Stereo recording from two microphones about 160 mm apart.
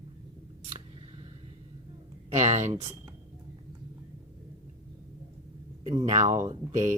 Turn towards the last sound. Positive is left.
turn(degrees=-50)  # may be behind; listen again after turning